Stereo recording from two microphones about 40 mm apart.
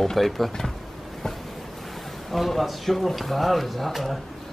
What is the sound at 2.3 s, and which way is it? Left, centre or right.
Speech, centre.